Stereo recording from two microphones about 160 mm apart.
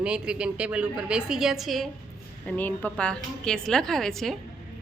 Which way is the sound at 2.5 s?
10° left (ahead or behind).